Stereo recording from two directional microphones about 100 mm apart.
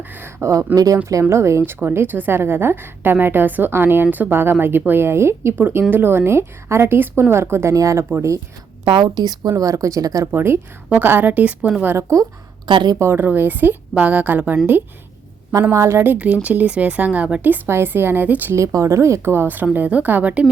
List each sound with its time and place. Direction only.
0.1 s a woman's voice: 20° right (ahead or behind)
8.8 s speech: 60° right (ahead or behind); by 10.2 s 35° right (ahead or behind)
10.3 s a woman's voice: 20° right (ahead or behind)
11.8 s a woman's voice: 25° right (ahead or behind)
12.6 s a woman's voice: 50° right (ahead or behind)
13.0 s a woman's voice: 20° right (ahead or behind)
15.7 s a woman's voice: 30° right (ahead or behind)
16.1 s a woman's voice: 15° right (ahead or behind)
18.5 s a woman's voice: 30° right (ahead or behind); by 20.5 s 15° right (ahead or behind)